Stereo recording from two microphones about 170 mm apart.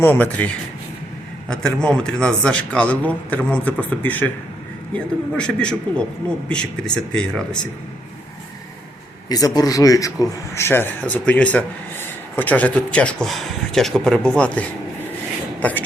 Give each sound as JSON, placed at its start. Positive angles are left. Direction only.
{"t": 0.0, "sound": "speech", "side_deg": 10}
{"t": 9.3, "sound": "speech", "side_deg": 20}